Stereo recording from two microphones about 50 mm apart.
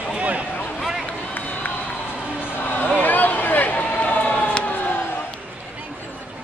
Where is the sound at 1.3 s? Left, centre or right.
Left.